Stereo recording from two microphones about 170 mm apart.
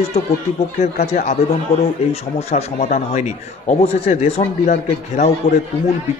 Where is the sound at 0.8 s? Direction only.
45° left (ahead or behind).